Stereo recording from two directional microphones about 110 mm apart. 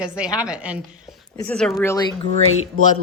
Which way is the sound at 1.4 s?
5° left (ahead or behind).